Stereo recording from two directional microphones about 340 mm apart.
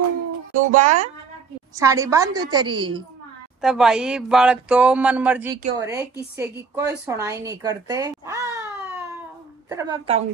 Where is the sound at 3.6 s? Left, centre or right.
Centre.